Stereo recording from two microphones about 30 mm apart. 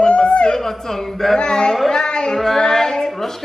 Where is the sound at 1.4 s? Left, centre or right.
Left.